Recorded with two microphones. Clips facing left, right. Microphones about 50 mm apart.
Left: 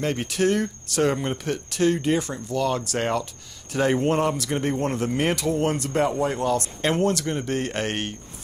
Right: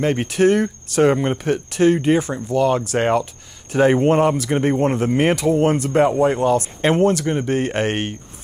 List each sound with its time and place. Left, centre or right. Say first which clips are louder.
0.0 s speech: right 7 dB; right